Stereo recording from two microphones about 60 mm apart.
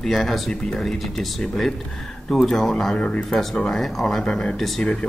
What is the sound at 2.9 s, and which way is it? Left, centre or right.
Speech, centre.